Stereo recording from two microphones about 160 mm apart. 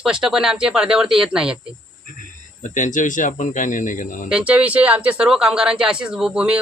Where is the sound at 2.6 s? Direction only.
50° left (ahead or behind).